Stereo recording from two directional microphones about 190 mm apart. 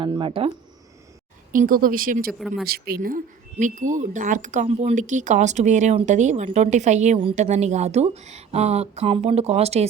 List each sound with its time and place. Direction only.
0.0 s speech: 25° right (ahead or behind)
1.5 s speech: 45° right (ahead or behind)